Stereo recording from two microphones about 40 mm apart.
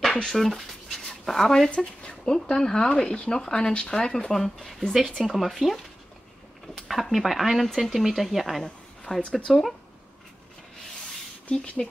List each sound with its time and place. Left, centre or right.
0.1 s speech: centre
0.9 s dog: centre
1.8 s speech: centre
6.9 s speech: centre
11.4 s speech: left